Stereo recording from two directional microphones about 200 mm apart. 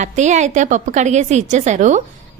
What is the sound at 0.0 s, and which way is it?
Speech, 35° right (ahead or behind).